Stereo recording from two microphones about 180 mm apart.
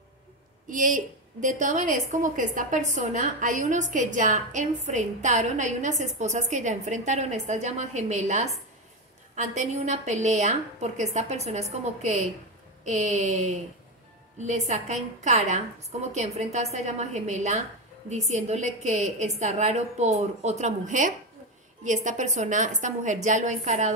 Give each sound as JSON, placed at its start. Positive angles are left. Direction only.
{"t": 0.7, "sound": "a woman's voice", "side_deg": -45}